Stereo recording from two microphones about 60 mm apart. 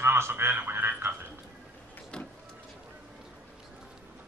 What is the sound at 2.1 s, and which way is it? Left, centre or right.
Vehicle, centre.